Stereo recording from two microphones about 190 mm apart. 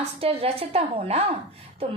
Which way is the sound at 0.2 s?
30° right (ahead or behind).